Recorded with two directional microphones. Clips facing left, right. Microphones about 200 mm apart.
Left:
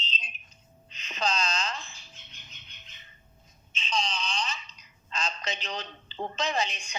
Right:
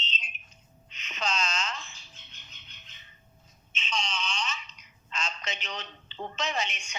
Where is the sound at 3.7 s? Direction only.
35° left (ahead or behind).